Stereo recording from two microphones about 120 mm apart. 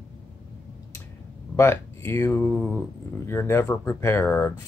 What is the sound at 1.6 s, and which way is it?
Speech, 20° left (ahead or behind).